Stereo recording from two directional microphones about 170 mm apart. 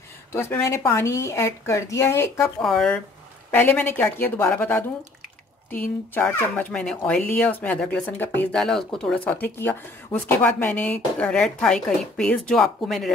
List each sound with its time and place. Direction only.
0.3 s speech: 15° left (ahead or behind)
2.6 s speech: centre (ahead or behind)
6.1 s speech: 10° left (ahead or behind)